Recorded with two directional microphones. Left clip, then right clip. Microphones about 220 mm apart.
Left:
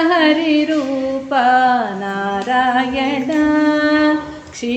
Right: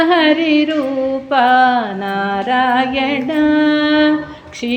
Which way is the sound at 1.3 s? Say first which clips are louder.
Right 1 dB; 35° right (ahead or behind).